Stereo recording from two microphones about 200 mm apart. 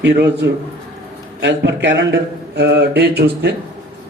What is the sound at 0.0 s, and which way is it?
Speech, 60° right (ahead or behind).